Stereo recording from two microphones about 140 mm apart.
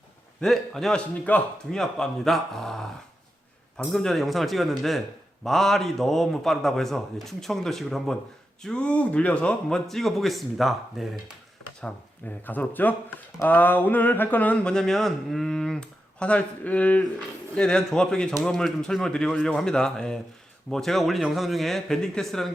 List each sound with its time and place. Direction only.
0.4 s a man's voice: centre (ahead or behind)
3.9 s a man's voice: centre (ahead or behind)
12.5 s a man's voice: 10° left (ahead or behind)